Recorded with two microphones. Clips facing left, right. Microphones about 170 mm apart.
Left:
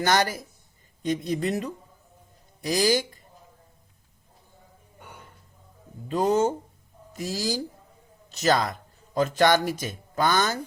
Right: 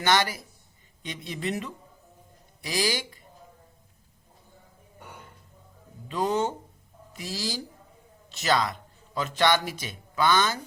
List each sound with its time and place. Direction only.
0.0 s speech: 45° left (ahead or behind)
6.1 s speech: 40° left (ahead or behind)